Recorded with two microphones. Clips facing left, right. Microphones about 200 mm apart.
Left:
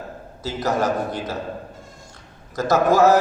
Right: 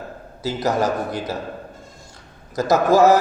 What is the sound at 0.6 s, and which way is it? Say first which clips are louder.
Speech: right 1 dB; 35° right (ahead or behind).